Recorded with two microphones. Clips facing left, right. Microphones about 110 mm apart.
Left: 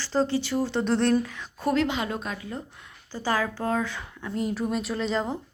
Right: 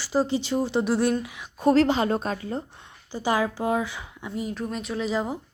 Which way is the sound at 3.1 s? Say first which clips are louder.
Right 2 dB; 15° right (ahead or behind).